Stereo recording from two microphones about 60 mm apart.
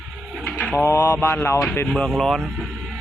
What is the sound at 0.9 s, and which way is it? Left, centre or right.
Mantra, left.